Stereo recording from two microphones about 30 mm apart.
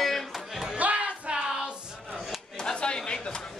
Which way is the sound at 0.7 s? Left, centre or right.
Right.